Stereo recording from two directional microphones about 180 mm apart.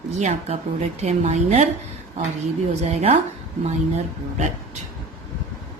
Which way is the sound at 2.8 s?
35° right (ahead or behind).